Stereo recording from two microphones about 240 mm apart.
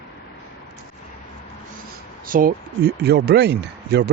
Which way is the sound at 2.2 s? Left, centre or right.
Right.